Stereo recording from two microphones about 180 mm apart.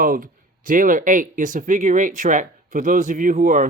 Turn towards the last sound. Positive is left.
turn(degrees=-45)  # may be behind; listen again after turning